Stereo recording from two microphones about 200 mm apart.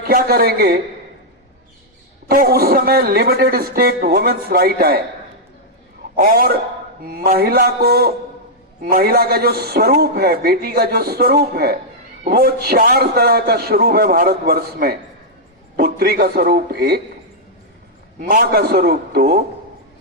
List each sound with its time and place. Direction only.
0.0 s a man's voice: 50° right (ahead or behind)
2.2 s a man's voice: 50° right (ahead or behind)
6.1 s a man's voice: 45° right (ahead or behind)
18.2 s a man's voice: 50° right (ahead or behind)